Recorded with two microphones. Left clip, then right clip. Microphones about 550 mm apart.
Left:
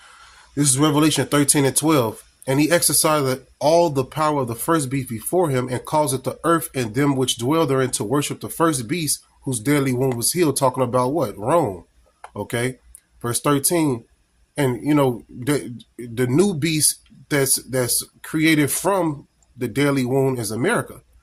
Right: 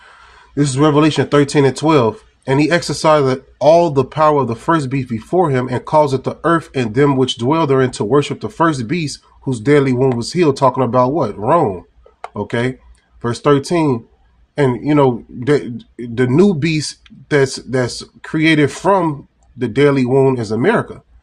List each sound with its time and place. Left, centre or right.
0.5 s speech: left